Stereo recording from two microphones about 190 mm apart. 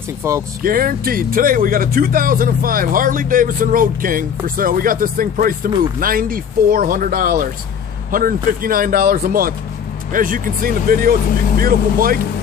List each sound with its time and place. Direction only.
0.2 s speech: 15° right (ahead or behind)
0.6 s speech: 50° right (ahead or behind)